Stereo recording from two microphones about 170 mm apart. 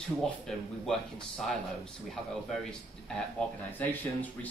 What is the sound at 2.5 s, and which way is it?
A man's voice, 5° left (ahead or behind).